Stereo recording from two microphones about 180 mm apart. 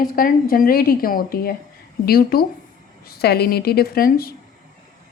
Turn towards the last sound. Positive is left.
turn(degrees=55)  # may be behind; listen again after turning